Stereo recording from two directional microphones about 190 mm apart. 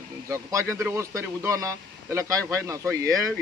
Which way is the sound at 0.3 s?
15° right (ahead or behind).